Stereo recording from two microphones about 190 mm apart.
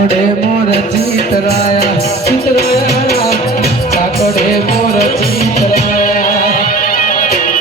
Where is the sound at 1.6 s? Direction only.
35° left (ahead or behind).